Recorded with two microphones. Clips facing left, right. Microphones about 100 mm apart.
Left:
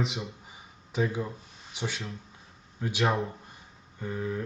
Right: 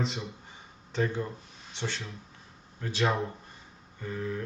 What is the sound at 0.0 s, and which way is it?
Speech, centre (ahead or behind).